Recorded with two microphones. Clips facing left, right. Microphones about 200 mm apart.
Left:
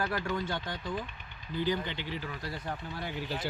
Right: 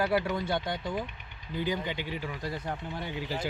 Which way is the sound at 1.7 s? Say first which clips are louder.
Right 1 dB; 15° right (ahead or behind).